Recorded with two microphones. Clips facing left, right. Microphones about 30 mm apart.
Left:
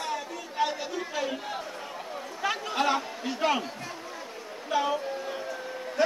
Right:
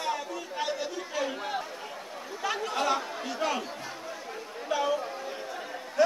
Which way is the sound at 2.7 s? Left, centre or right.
Left.